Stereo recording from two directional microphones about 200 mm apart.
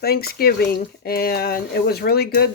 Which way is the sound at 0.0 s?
50° left (ahead or behind).